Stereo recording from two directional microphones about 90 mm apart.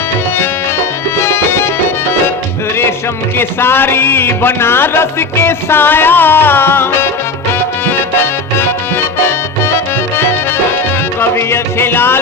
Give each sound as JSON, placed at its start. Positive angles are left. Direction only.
{"t": 1.2, "sound": "music", "side_deg": 30}
{"t": 3.3, "sound": "music", "side_deg": 25}
{"t": 11.2, "sound": "music", "side_deg": 25}